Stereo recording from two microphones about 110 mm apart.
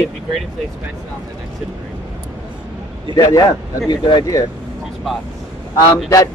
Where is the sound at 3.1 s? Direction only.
40° left (ahead or behind).